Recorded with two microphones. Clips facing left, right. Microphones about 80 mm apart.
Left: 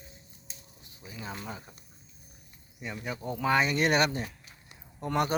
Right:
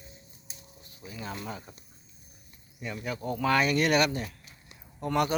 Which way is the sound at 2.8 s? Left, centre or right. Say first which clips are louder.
Right 2 dB; centre.